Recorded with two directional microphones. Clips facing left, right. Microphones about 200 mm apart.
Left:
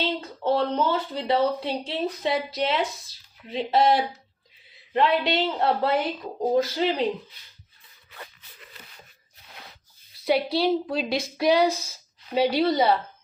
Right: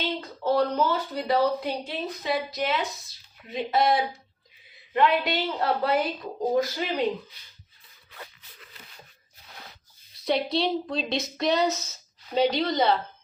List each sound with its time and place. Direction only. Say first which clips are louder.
0.0 s speech: left 2 dB; 25° left (ahead or behind)
10.2 s a woman's voice: left 3 dB; 5° left (ahead or behind)